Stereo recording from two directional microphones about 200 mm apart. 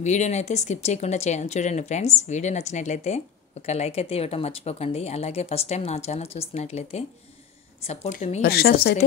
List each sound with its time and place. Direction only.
0.0 s speech: 35° left (ahead or behind)
8.4 s a woman's voice: 50° left (ahead or behind)